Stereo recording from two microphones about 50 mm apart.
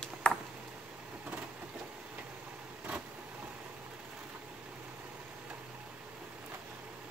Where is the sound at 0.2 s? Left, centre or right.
Centre.